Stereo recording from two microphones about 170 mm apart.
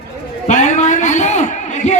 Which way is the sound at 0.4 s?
45° left (ahead or behind).